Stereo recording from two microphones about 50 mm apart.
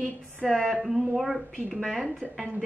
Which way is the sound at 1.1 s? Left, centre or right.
Centre.